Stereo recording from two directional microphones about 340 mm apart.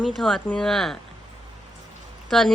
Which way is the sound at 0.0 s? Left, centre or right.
Centre.